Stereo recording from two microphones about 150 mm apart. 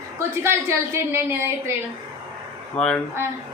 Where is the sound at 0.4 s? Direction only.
15° right (ahead or behind).